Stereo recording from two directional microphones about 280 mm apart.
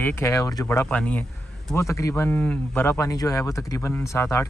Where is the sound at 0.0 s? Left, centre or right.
Centre.